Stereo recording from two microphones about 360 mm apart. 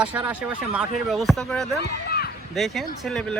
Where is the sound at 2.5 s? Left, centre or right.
Centre.